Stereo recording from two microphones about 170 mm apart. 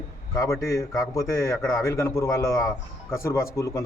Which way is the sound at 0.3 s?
20° left (ahead or behind).